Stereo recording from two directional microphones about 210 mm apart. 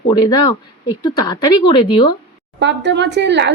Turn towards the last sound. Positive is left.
turn(degrees=-55)  # may be behind; listen again after turning